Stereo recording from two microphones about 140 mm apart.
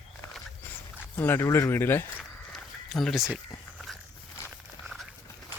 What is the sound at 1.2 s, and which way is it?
Speech, 15° left (ahead or behind).